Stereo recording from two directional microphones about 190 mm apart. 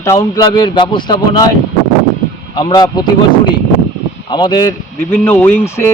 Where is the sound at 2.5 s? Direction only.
20° left (ahead or behind).